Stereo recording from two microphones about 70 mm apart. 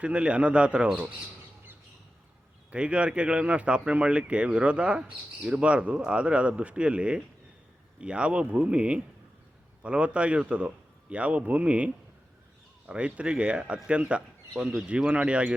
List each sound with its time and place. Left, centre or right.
0.0 s speech: centre
2.6 s speech: centre
12.9 s speech: centre